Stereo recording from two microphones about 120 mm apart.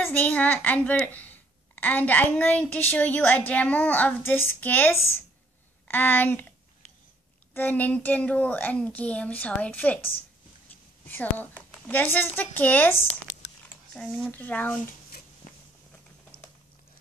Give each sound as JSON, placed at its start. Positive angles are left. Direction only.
{"t": 0.0, "sound": "a woman's voice", "side_deg": 15}
{"t": 7.5, "sound": "a woman's voice", "side_deg": 15}
{"t": 13.9, "sound": "a woman's voice", "side_deg": 10}
{"t": 15.4, "sound": "walk", "side_deg": 80}